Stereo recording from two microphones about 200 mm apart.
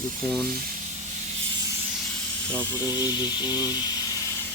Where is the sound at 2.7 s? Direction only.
15° left (ahead or behind).